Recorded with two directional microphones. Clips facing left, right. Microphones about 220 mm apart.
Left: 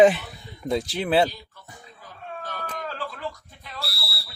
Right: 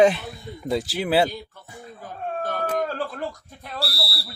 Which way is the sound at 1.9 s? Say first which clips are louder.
Right 8 dB; 50° right (ahead or behind).